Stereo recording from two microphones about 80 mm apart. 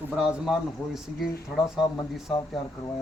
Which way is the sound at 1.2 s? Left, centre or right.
Centre.